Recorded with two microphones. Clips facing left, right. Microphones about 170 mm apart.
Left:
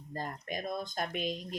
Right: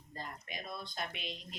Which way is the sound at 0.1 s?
45° left (ahead or behind).